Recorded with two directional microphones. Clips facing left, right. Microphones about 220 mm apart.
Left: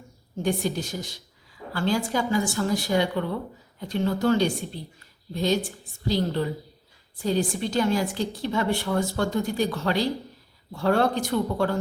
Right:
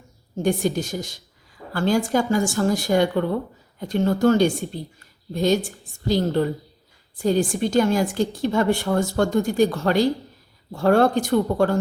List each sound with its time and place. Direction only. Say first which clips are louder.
0.4 s a woman's voice: right 4 dB; 45° right (ahead or behind)